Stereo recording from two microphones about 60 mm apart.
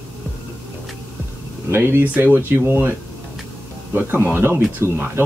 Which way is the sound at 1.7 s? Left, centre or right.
Right.